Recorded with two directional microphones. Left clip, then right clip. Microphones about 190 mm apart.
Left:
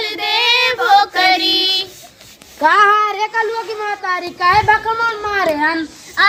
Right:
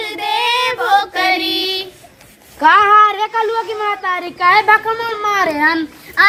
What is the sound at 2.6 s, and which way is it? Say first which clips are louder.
Female singing: right 3 dB; 60° left (ahead or behind).